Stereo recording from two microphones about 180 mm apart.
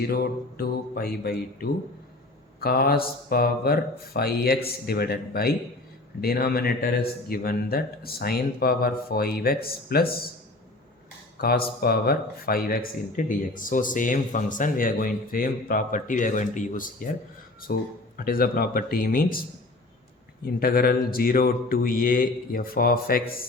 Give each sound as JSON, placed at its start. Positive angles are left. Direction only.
{"t": 0.1, "sound": "speech", "side_deg": 60}
{"t": 11.3, "sound": "speech", "side_deg": 60}